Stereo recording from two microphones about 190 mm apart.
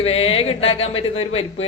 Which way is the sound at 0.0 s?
30° left (ahead or behind).